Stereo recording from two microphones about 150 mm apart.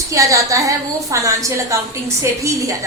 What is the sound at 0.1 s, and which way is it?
A woman's voice, 20° right (ahead or behind).